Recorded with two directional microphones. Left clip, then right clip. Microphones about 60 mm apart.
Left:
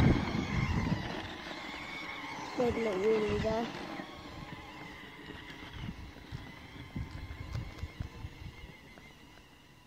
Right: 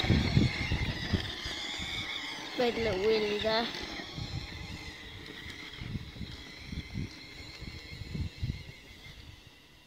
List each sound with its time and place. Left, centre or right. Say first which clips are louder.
0.0 s vehicle: right 1 dB; left; by 2.6 s centre
2.8 s speech: right 1 dB; right
3.3 s speech: right 2 dB; centre
3.6 s vehicle: right 3 dB; centre